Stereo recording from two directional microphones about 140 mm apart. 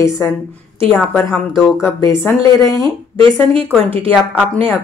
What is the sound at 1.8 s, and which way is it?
A woman's voice, 20° left (ahead or behind).